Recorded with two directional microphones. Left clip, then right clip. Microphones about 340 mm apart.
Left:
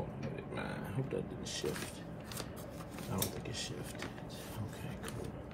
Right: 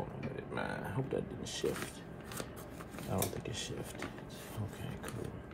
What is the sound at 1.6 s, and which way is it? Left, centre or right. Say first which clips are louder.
Speech: right 4 dB; centre.